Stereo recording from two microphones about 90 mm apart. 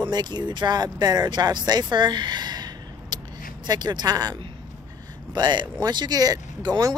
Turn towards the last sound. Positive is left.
turn(degrees=-45)  # may be behind; listen again after turning